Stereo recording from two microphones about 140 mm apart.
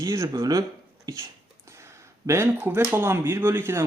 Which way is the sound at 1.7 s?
20° right (ahead or behind).